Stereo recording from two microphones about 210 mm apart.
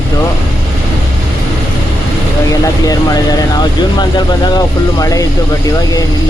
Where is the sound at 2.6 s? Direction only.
15° left (ahead or behind).